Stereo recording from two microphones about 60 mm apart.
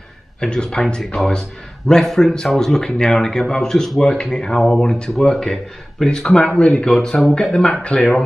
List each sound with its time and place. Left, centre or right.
0.4 s speech: centre